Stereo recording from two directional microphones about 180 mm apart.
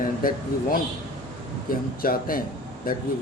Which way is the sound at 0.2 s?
50° left (ahead or behind).